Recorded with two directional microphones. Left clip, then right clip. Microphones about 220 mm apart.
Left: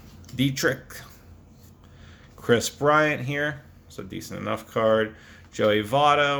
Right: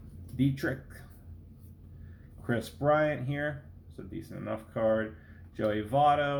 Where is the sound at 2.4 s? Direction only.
40° left (ahead or behind).